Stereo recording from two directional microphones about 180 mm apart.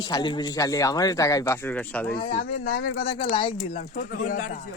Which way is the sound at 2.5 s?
50° left (ahead or behind).